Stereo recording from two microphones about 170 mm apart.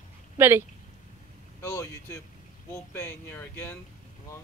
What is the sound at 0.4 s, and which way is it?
Speech, 15° right (ahead or behind).